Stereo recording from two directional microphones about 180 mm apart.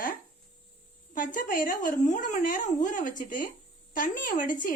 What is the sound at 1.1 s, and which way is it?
Speech, 45° left (ahead or behind).